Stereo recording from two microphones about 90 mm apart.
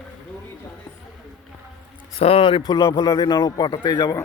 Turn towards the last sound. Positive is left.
turn(degrees=50)  # may be behind; listen again after turning